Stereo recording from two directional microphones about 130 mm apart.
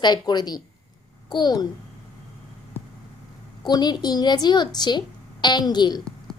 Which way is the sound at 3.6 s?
30° left (ahead or behind).